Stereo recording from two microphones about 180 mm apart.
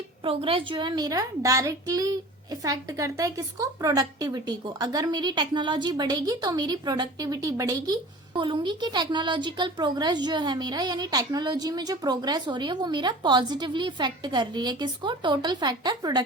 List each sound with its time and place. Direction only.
0.3 s a woman's voice: 30° right (ahead or behind)